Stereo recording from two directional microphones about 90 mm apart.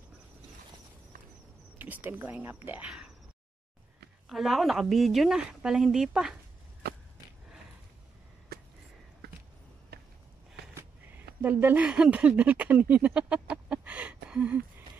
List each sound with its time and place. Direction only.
1.8 s speech: 20° right (ahead or behind)
4.3 s a woman's voice: centre (ahead or behind)
11.4 s speech: 20° right (ahead or behind)
13.3 s chicken: 15° right (ahead or behind)